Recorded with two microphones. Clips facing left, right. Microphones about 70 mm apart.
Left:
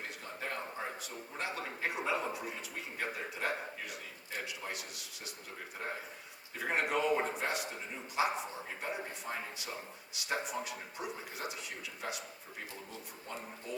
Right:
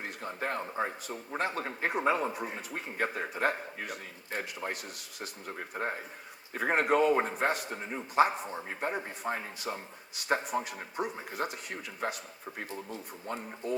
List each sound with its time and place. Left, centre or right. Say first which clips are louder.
0.0 s a man's voice: right 6 dB; right